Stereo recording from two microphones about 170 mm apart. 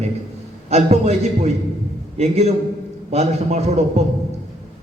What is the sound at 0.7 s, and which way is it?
A man's voice, 40° right (ahead or behind).